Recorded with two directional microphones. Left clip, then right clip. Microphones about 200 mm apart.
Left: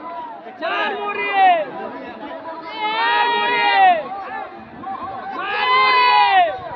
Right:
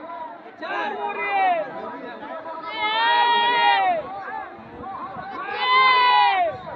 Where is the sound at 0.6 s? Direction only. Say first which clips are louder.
Left 5 dB; 35° left (ahead or behind).